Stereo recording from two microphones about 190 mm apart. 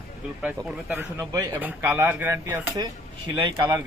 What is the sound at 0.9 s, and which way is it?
Speech, 10° right (ahead or behind).